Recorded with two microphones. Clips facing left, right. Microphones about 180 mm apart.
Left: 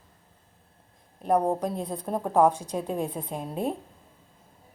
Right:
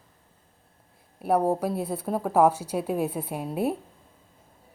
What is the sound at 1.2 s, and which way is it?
A woman's voice, 5° right (ahead or behind).